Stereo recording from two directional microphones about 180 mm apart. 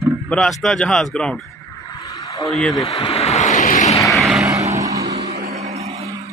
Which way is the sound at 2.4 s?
Centre (ahead or behind).